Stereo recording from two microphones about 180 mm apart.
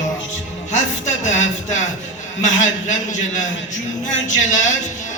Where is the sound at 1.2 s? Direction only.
40° left (ahead or behind).